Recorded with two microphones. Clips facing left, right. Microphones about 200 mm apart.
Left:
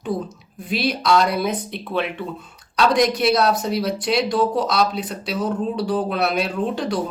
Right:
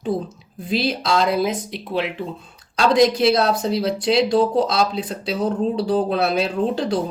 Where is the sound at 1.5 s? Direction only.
90° right.